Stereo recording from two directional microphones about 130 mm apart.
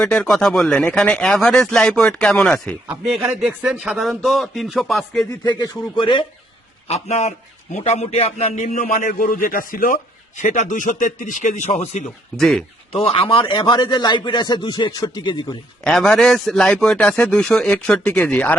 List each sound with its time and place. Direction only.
0.0 s speech: 5° left (ahead or behind)
3.0 s speech: 5° right (ahead or behind)
5.4 s a man's voice: 35° left (ahead or behind)
6.8 s a man's voice: 55° left (ahead or behind)
12.4 s speech: 5° left (ahead or behind)
12.9 s a man's voice: 45° left (ahead or behind)
15.8 s a man's voice: 5° left (ahead or behind)